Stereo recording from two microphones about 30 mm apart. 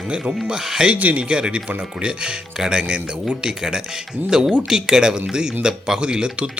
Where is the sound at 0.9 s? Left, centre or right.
Right.